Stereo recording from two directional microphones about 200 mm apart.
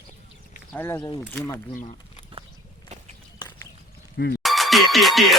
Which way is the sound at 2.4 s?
25° right (ahead or behind).